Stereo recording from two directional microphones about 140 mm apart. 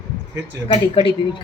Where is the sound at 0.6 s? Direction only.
40° left (ahead or behind).